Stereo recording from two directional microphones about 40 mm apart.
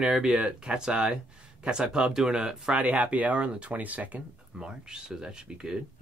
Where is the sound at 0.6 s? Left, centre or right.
Right.